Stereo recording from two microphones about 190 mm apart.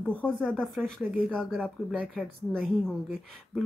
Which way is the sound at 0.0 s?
5° left (ahead or behind).